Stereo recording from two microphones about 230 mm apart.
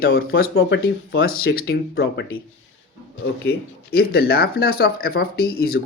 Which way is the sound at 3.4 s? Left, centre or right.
Left.